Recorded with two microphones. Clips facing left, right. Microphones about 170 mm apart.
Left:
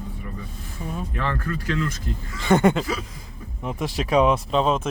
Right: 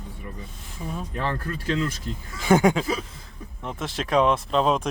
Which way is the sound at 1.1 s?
30° right (ahead or behind).